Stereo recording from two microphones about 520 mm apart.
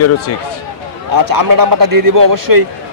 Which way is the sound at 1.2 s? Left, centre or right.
Right.